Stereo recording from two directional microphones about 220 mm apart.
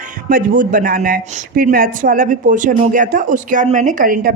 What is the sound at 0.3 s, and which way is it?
Speech, 40° right (ahead or behind).